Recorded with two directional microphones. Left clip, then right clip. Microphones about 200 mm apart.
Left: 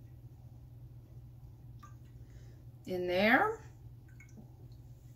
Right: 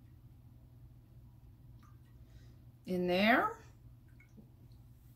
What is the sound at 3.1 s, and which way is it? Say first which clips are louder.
Speech: left 1 dB; 45° right (ahead or behind).